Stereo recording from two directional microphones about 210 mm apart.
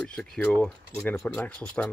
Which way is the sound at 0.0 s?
5° left (ahead or behind).